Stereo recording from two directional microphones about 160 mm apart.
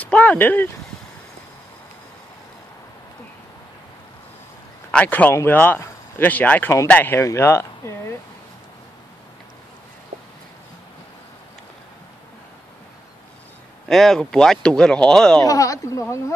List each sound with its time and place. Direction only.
0.0 s speech: 10° left (ahead or behind)
4.9 s speech: 10° left (ahead or behind)
13.8 s speech: 5° left (ahead or behind)
15.4 s speech: 20° left (ahead or behind)